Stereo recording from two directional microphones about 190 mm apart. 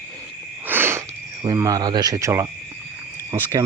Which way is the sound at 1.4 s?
20° right (ahead or behind).